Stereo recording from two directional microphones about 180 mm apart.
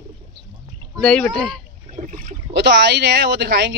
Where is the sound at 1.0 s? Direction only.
5° left (ahead or behind).